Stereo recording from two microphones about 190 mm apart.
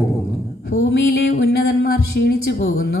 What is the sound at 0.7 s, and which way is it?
Speech, 70° left (ahead or behind).